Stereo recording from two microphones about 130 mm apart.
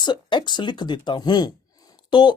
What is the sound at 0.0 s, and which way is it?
Speech, 35° left (ahead or behind).